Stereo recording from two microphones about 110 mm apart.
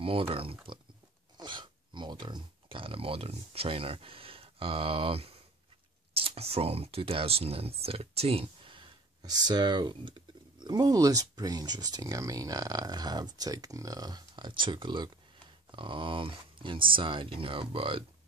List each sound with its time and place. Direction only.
0.0 s speech: 55° right (ahead or behind)
1.4 s speech: 45° right (ahead or behind)
9.2 s speech: 40° right (ahead or behind); by 18.0 s 55° right (ahead or behind)